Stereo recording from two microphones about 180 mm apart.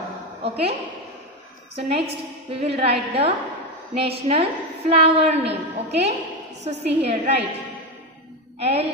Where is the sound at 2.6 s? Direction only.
35° right (ahead or behind).